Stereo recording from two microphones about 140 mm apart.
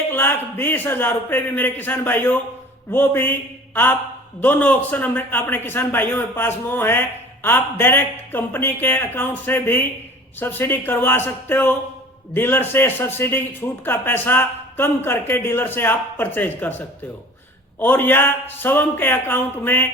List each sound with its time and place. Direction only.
0.1 s a man's voice: 15° left (ahead or behind)
4.4 s a man's voice: 10° left (ahead or behind)